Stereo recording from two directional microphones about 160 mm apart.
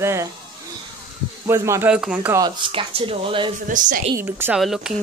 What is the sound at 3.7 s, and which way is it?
Speech, 55° right (ahead or behind).